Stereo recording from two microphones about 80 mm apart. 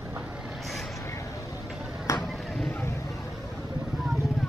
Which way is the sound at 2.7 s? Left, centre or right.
Left.